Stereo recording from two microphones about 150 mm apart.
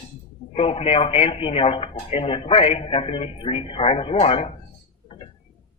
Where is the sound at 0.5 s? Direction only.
40° left (ahead or behind).